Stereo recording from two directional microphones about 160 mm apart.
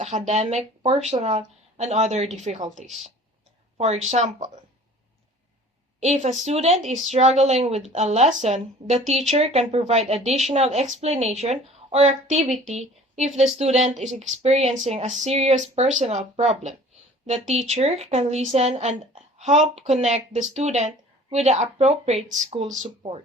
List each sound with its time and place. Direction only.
0.0 s speech: 45° right (ahead or behind)
6.0 s speech: 45° right (ahead or behind)
14.8 s a sound: 40° right (ahead or behind)
15.2 s speech: 40° right (ahead or behind)